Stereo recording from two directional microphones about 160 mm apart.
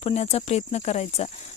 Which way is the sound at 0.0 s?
40° left (ahead or behind).